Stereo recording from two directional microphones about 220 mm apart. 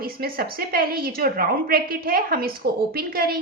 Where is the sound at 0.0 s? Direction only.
45° right (ahead or behind).